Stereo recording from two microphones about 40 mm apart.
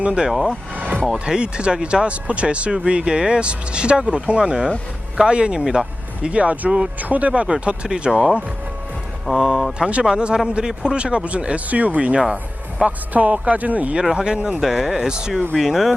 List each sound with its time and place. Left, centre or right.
0.0 s speech: right
0.3 s speech: centre
1.1 s speech: centre; by 7.4 s right
7.4 s speech: right
9.2 s speech: centre
10.1 s speech: right
13.1 s speech: right
14.0 s speech: centre
14.6 s speech: centre